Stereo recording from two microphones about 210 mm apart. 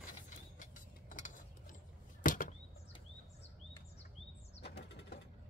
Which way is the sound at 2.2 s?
40° left (ahead or behind).